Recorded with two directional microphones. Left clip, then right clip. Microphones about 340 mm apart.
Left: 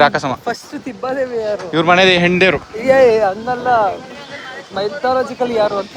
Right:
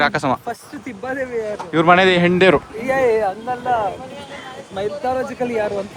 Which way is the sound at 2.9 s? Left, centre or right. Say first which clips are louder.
Left 6 dB; left.